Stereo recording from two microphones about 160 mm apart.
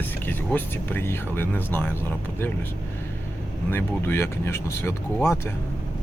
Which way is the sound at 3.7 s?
15° left (ahead or behind).